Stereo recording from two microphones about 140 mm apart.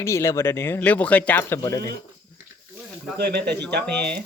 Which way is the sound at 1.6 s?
25° left (ahead or behind).